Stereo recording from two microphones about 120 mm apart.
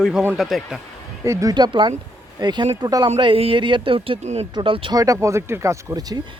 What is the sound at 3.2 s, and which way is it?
Speech, 50° right (ahead or behind).